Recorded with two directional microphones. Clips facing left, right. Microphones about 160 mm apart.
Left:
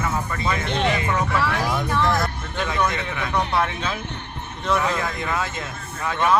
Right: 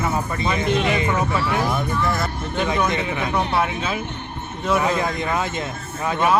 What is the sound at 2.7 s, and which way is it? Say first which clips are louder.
Speech: right 1 dB; 20° right (ahead or behind).